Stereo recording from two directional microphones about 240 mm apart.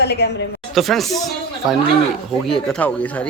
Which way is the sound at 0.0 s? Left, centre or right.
Left.